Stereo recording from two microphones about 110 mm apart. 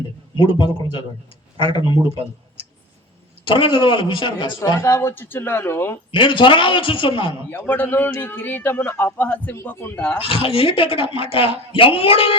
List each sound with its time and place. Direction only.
0.3 s a man's voice: 50° left (ahead or behind)
3.4 s a man's voice: 50° left (ahead or behind)
4.8 s speech: 25° left (ahead or behind)
6.1 s a man's voice: 50° left (ahead or behind)
7.7 s a man's voice: 15° left (ahead or behind)
10.2 s speech: 55° left (ahead or behind)